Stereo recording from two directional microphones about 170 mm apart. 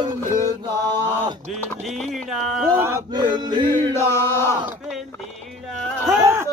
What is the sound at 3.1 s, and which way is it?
Music, 25° right (ahead or behind).